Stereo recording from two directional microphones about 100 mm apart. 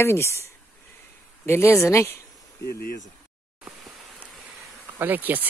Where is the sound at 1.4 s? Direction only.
25° left (ahead or behind).